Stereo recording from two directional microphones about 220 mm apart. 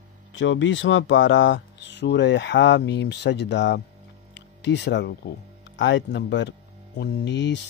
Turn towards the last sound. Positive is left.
turn(degrees=50)  # may be behind; listen again after turning